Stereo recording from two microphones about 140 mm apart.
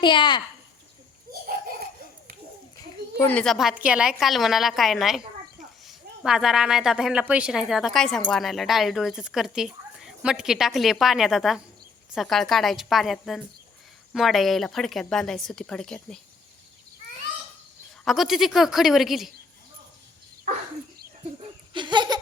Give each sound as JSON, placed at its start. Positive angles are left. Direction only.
{"t": 0.0, "sound": "a child's voice", "side_deg": 35}
{"t": 1.3, "sound": "a sound", "side_deg": -90}
{"t": 3.2, "sound": "speech", "side_deg": 10}
{"t": 18.0, "sound": "speech", "side_deg": 0}
{"t": 21.7, "sound": "laughter", "side_deg": -35}